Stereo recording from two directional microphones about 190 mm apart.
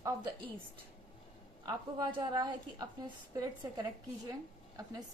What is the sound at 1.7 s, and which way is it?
A woman's voice, 25° right (ahead or behind).